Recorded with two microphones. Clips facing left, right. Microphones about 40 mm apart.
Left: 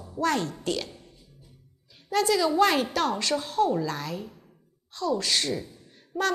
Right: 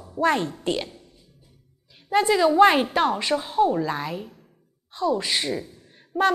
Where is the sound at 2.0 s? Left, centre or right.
Right.